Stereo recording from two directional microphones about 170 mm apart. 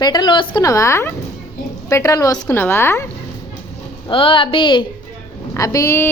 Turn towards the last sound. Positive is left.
turn(degrees=15)  # may be behind; listen again after turning